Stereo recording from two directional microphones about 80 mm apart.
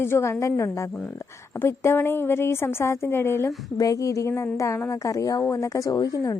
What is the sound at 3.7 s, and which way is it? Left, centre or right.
A woman's voice, left.